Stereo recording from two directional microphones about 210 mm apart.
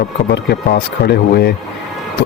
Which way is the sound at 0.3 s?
50° left (ahead or behind).